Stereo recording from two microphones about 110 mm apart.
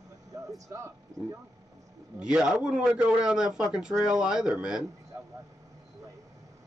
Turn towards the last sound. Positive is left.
turn(degrees=-10)  # may be behind; listen again after turning